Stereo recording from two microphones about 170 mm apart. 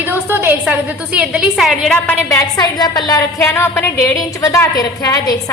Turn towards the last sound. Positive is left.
turn(degrees=20)  # may be behind; listen again after turning